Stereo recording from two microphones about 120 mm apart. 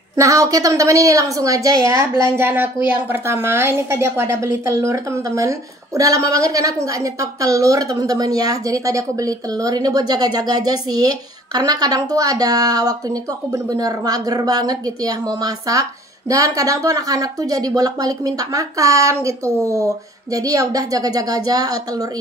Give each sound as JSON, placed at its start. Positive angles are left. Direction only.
{"t": 0.1, "sound": "a woman's voice", "side_deg": -25}